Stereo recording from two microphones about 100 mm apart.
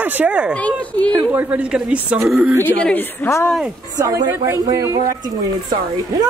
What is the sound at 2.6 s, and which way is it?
Speech, 15° left (ahead or behind).